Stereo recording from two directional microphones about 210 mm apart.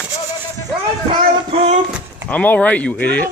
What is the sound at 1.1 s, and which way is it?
Speech, 25° right (ahead or behind).